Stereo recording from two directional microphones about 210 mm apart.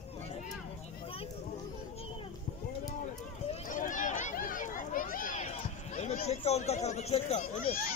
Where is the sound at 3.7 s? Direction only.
40° left (ahead or behind).